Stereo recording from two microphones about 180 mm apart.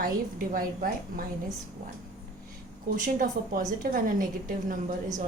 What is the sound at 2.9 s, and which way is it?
A woman's voice, 50° right (ahead or behind).